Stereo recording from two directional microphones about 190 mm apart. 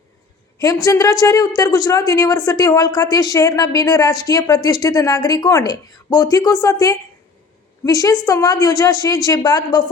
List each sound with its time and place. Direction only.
0.9 s a woman's voice: 15° left (ahead or behind)